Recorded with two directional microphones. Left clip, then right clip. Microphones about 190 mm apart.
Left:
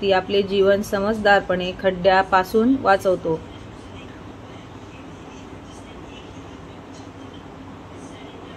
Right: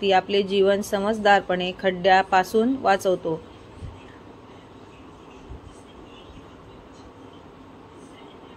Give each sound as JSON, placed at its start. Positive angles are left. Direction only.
{"t": 0.0, "sound": "speech", "side_deg": -30}